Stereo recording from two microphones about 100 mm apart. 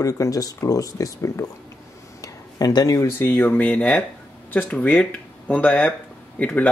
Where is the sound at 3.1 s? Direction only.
20° left (ahead or behind).